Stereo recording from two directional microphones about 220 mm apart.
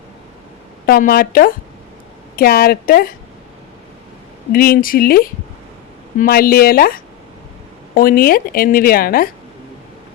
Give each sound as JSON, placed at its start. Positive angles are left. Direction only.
{"t": 0.9, "sound": "a woman's voice", "side_deg": 40}
{"t": 4.5, "sound": "a woman's voice", "side_deg": 40}